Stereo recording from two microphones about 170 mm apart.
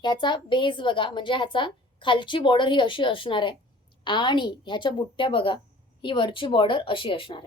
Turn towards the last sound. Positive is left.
turn(degrees=30)  # may be behind; listen again after turning